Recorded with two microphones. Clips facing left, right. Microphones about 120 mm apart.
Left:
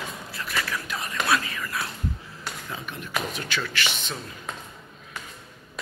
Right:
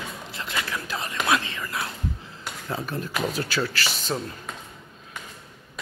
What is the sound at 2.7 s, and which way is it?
Speech, 35° right (ahead or behind).